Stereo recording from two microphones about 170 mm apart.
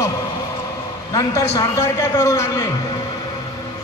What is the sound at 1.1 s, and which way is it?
A man's voice, 20° left (ahead or behind).